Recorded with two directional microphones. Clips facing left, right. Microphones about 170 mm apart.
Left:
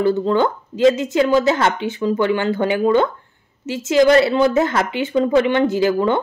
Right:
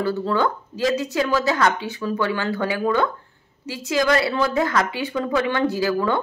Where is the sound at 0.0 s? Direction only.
20° left (ahead or behind).